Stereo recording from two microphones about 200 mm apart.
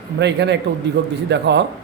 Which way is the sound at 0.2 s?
60° right (ahead or behind).